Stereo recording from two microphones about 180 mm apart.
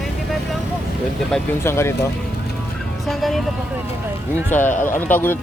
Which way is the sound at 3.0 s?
Centre (ahead or behind).